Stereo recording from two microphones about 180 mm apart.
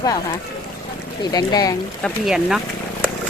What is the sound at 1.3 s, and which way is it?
Speech, 20° left (ahead or behind).